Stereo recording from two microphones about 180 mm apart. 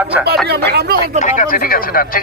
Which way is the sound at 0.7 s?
60° right (ahead or behind).